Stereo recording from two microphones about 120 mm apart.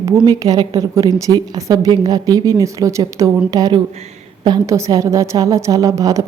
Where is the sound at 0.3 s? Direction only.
30° right (ahead or behind).